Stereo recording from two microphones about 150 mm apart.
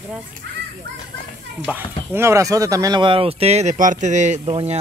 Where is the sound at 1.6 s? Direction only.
15° right (ahead or behind).